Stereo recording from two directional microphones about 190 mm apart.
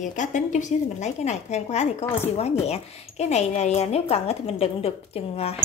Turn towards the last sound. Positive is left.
turn(degrees=30)  # may be behind; listen again after turning